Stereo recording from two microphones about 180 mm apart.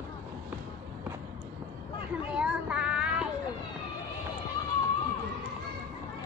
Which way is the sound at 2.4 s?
5° right (ahead or behind).